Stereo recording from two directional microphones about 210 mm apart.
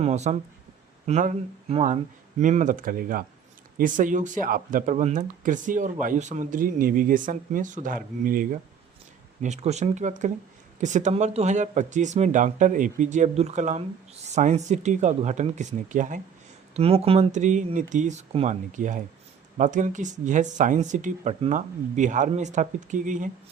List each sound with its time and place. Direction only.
0.0 s speech: 35° right (ahead or behind)